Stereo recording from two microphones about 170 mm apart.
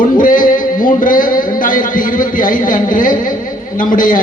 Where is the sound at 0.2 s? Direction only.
50° left (ahead or behind).